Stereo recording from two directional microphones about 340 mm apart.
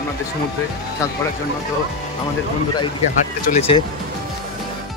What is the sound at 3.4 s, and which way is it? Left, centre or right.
Speech, centre.